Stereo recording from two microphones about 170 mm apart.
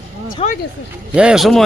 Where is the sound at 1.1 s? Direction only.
5° right (ahead or behind).